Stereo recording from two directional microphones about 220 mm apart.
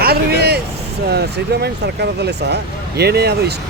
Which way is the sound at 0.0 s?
45° right (ahead or behind).